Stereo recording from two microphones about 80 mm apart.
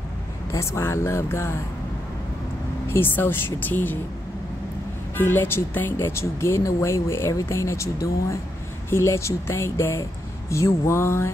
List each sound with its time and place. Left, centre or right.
0.5 s speech: left
2.9 s speech: left
5.1 s speech: left